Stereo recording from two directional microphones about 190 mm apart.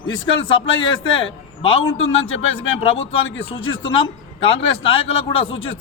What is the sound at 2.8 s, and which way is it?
Speech, 30° left (ahead or behind).